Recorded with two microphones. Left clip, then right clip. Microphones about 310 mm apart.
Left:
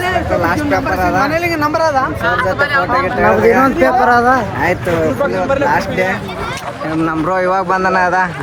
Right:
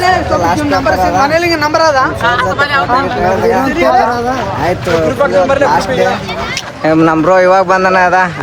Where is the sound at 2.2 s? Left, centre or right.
Centre.